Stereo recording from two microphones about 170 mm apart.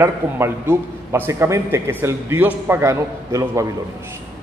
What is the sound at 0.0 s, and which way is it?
A man's voice, 15° right (ahead or behind).